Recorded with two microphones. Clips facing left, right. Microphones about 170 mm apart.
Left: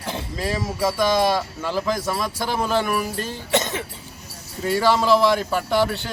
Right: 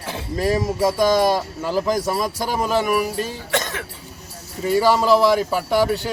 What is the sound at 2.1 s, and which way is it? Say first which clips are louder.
Speech: right 2 dB; 10° right (ahead or behind).